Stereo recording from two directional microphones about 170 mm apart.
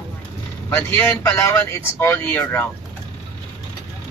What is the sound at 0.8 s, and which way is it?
Speech, 10° left (ahead or behind).